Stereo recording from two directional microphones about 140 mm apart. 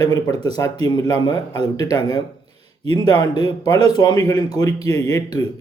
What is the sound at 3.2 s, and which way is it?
A man's voice, 30° left (ahead or behind).